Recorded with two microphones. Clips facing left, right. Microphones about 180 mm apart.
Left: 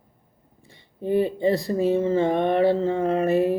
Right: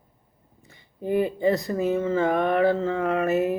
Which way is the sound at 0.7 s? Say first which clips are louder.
Left 2 dB; 30° left (ahead or behind).